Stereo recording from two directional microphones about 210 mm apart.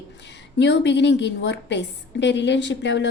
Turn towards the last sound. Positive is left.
turn(degrees=60)  # may be behind; listen again after turning